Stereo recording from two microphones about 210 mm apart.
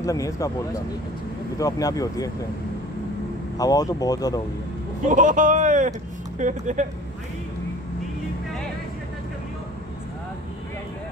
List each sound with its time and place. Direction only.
0.0 s speech: 15° left (ahead or behind)
3.5 s speech: 15° left (ahead or behind)
5.0 s speech: 40° right (ahead or behind)